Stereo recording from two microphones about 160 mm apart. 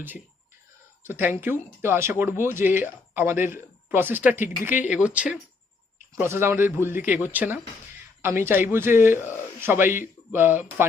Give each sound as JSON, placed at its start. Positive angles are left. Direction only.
{"t": 1.0, "sound": "speech", "side_deg": -15}